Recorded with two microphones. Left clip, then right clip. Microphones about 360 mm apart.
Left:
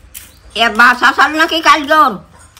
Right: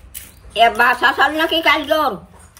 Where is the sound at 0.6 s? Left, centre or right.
Centre.